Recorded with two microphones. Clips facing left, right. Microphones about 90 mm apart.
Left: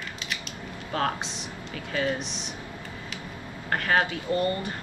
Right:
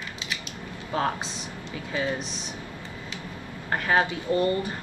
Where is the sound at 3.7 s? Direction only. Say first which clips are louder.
Right 1 dB; 20° right (ahead or behind).